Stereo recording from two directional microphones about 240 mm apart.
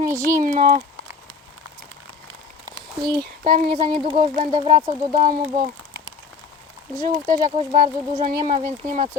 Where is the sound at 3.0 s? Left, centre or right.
Centre.